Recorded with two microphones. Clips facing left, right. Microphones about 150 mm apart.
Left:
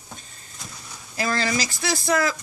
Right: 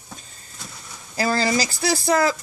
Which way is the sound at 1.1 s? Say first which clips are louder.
Right 4 dB; 35° right (ahead or behind).